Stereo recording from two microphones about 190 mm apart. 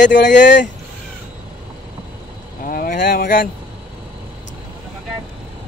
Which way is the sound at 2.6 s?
50° left (ahead or behind).